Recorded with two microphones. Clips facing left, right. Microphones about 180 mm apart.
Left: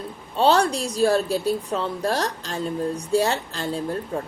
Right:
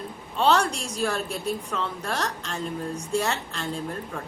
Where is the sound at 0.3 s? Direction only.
35° left (ahead or behind).